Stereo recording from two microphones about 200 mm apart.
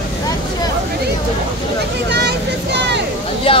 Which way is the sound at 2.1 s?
55° right (ahead or behind).